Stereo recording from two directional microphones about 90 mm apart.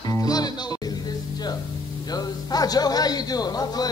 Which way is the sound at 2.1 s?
45° left (ahead or behind).